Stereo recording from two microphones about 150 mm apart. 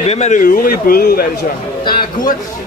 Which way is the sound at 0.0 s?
45° left (ahead or behind).